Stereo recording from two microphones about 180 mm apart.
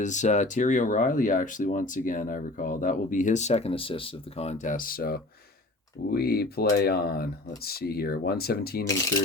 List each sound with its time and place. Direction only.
0.0 s speech: 40° left (ahead or behind); by 8.8 s 60° left (ahead or behind)